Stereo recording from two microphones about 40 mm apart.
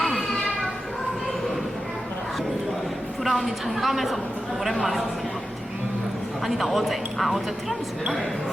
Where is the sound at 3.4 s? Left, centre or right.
Centre.